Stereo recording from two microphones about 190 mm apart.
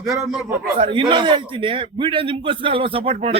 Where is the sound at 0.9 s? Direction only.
25° right (ahead or behind).